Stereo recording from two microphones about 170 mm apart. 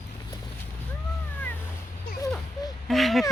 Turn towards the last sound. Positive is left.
turn(degrees=0)  # may be behind; listen again after turning